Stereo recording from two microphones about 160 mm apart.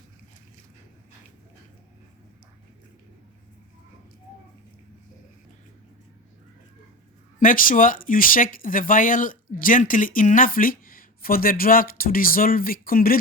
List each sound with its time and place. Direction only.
7.3 s speech: 60° left (ahead or behind)